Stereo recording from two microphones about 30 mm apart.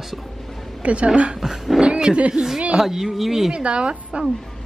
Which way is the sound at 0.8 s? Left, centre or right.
Right.